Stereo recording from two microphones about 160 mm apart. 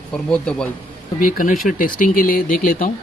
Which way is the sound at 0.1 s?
5° left (ahead or behind).